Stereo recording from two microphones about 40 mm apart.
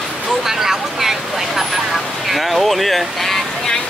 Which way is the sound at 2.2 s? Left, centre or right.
Centre.